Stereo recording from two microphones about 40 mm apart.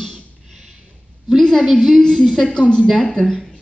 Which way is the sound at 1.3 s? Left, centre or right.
Centre.